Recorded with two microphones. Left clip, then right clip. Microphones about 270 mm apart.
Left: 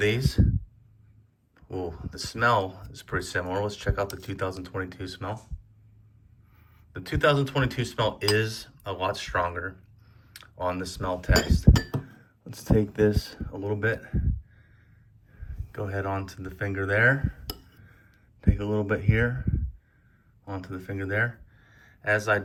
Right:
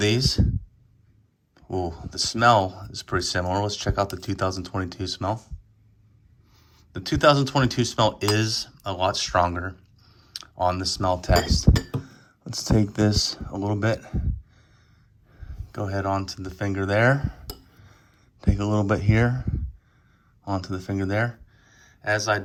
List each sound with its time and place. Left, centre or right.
0.0 s speech: centre
1.5 s speech: centre
6.7 s speech: centre
11.7 s speech: left
12.7 s speech: centre
15.7 s speech: centre
18.4 s speech: centre